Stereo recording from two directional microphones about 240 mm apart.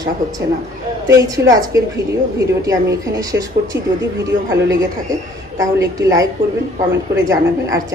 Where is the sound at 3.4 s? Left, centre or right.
Right.